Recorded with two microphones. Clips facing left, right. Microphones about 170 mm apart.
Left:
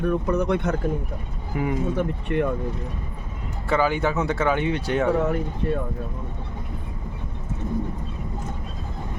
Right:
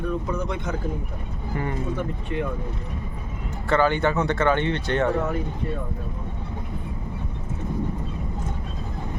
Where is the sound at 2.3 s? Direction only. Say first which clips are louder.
Left 5 dB; 60° left (ahead or behind).